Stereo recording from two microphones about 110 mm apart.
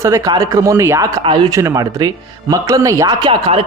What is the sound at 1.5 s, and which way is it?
Speech, 30° right (ahead or behind).